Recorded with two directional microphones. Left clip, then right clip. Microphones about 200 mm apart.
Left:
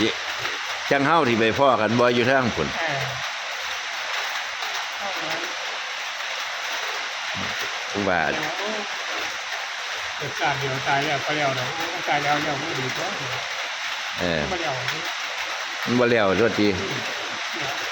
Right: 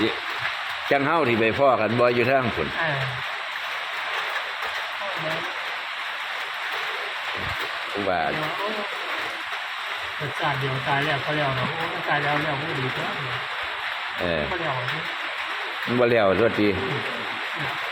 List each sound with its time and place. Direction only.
0.9 s speech: 20° left (ahead or behind)
16.0 s speech: 20° left (ahead or behind)